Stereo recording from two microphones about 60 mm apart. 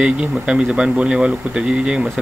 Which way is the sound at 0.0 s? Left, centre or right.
Centre.